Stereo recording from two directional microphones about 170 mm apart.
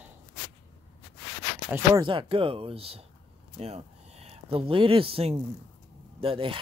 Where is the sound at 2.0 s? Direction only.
30° right (ahead or behind).